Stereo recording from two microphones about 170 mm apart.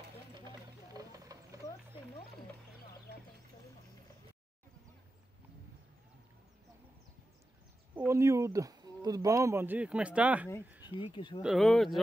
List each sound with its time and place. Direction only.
0.5 s a sound: 20° right (ahead or behind)
8.1 s speech: 15° right (ahead or behind)
11.0 s speech: 30° left (ahead or behind)
11.4 s speech: centre (ahead or behind)